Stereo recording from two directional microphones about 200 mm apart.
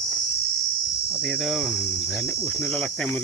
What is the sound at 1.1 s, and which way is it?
Speech, centre (ahead or behind).